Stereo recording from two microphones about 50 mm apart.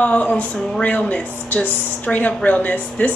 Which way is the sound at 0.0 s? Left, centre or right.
Left.